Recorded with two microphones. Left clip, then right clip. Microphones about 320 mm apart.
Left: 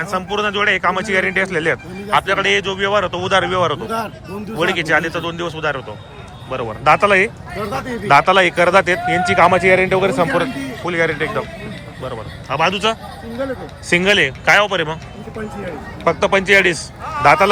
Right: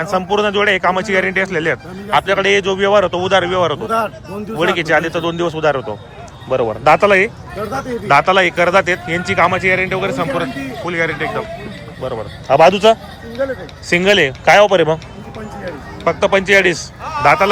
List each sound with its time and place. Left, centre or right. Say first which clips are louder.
0.0 s a man's voice: right 4 dB; centre
12.0 s a man's voice: right 8 dB; centre
16.0 s a man's voice: right 1 dB; centre